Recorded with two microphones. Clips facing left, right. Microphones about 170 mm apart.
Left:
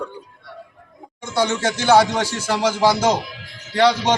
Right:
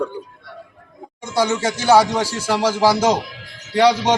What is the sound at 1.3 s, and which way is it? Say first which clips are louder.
A man's voice: right 1 dB; 10° right (ahead or behind).